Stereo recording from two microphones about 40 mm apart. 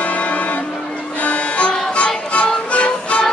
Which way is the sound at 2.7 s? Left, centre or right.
Left.